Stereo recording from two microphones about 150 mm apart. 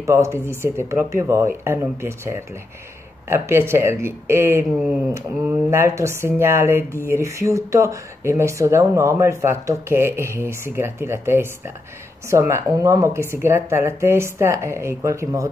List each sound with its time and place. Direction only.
0.0 s speech: 20° right (ahead or behind)
4.6 s speech: 5° right (ahead or behind)
5.1 s speech: 15° right (ahead or behind)